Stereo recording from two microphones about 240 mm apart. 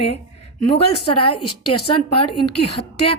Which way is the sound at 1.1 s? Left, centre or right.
Left.